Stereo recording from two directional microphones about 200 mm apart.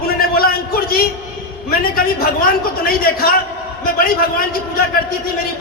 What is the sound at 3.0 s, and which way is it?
Speech, 50° left (ahead or behind).